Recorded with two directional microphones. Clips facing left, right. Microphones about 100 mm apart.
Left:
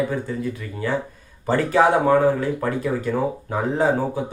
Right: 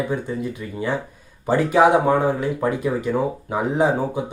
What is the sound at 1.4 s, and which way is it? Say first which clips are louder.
Speech: right 2 dB; 15° right (ahead or behind).